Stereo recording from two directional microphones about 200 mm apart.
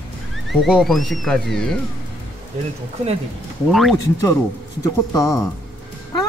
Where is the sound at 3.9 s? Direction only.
15° left (ahead or behind).